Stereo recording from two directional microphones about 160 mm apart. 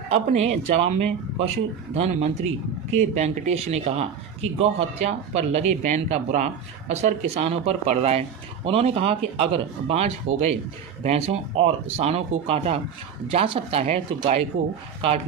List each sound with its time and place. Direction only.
0.1 s speech: 40° right (ahead or behind)